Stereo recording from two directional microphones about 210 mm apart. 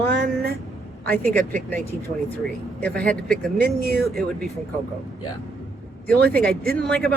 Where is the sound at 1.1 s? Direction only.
45° right (ahead or behind).